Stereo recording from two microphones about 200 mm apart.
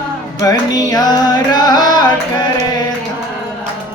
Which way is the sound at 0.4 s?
20° left (ahead or behind).